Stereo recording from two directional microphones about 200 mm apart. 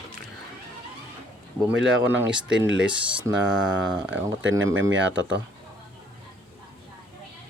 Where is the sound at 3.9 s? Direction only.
10° right (ahead or behind).